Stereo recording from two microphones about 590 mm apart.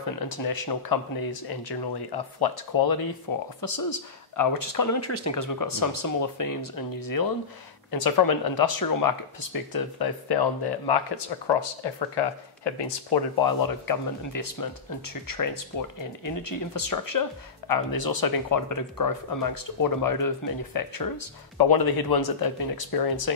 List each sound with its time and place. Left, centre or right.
0.3 s speech: left